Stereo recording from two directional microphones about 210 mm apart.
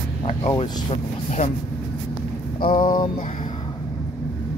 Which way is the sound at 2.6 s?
25° left (ahead or behind).